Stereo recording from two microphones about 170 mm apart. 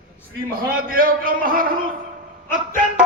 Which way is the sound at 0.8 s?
55° right (ahead or behind).